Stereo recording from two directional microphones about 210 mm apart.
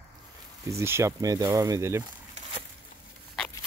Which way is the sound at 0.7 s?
15° right (ahead or behind).